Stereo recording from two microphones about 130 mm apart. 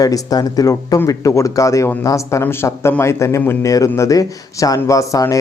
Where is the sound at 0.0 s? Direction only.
30° left (ahead or behind).